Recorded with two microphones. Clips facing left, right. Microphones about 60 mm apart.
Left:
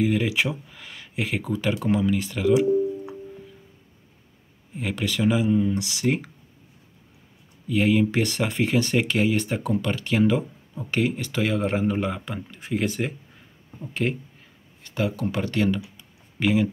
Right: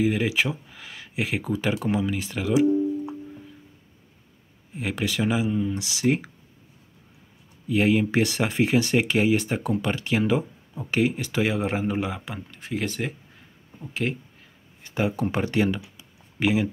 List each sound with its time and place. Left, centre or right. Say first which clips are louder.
0.0 s speech: even; centre
4.7 s speech: even; centre
7.6 s speech: even; centre
12.4 s speech: left 3 dB; centre
14.8 s speech: right 1 dB; right